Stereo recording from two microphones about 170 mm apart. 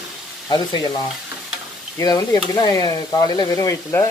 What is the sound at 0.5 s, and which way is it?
Speech, 25° left (ahead or behind).